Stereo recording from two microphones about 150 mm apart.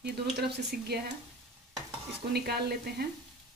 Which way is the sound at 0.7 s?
90° right.